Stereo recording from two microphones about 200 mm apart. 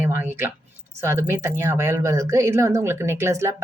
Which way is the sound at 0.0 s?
10° right (ahead or behind).